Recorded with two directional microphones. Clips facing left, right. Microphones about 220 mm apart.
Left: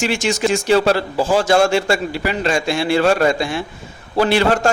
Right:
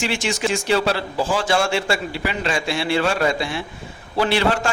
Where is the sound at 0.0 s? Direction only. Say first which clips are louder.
Left 4 dB; 45° left (ahead or behind).